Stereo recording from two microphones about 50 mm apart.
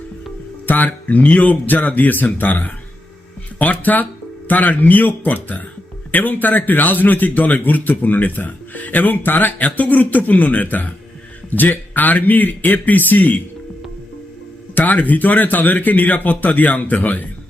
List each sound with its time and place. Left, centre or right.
0.7 s a man's voice: left
14.8 s a man's voice: left